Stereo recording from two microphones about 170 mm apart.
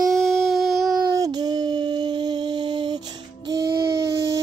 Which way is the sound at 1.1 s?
20° right (ahead or behind).